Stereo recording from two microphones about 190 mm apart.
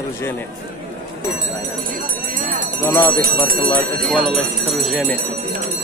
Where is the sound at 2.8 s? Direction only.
15° left (ahead or behind).